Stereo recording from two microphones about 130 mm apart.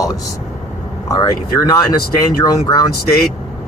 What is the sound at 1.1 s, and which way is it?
Speech, 25° left (ahead or behind).